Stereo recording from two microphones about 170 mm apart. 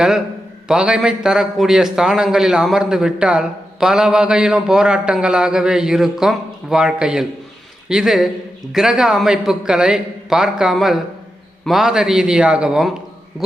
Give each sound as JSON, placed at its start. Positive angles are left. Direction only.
{"t": 0.7, "sound": "a man's voice", "side_deg": -5}